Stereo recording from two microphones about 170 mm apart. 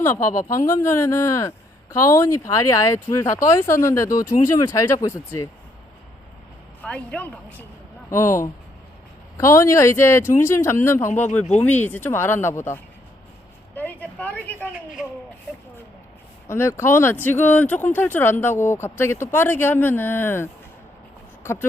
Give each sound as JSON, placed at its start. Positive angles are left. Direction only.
{"t": 0.0, "sound": "speech", "side_deg": 15}
{"t": 6.8, "sound": "speech", "side_deg": 5}
{"t": 9.4, "sound": "speech", "side_deg": 15}
{"t": 13.7, "sound": "a sound", "side_deg": 10}
{"t": 16.5, "sound": "speech", "side_deg": 15}